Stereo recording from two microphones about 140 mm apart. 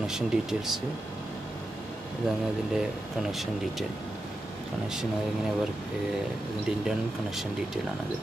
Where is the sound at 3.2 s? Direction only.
Centre (ahead or behind).